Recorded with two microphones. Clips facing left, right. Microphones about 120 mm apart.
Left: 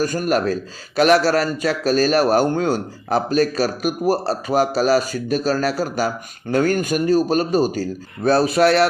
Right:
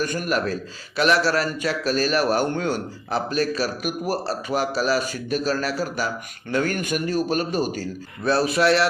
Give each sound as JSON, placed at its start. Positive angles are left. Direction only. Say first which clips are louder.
{"t": 0.0, "sound": "a man's voice", "louder": "left 5 dB", "side_deg": 40}